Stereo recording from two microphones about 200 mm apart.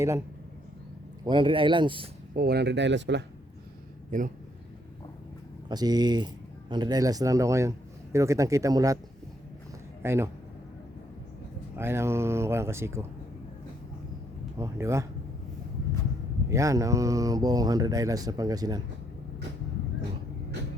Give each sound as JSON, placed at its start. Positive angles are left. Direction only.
{"t": 1.3, "sound": "speech", "side_deg": -25}
{"t": 2.3, "sound": "speech", "side_deg": -50}
{"t": 4.1, "sound": "speech", "side_deg": -40}
{"t": 5.6, "sound": "speech", "side_deg": -20}
{"t": 10.0, "sound": "speech", "side_deg": -10}
{"t": 11.8, "sound": "speech", "side_deg": -10}
{"t": 14.6, "sound": "speech", "side_deg": -15}
{"t": 16.5, "sound": "speech", "side_deg": -15}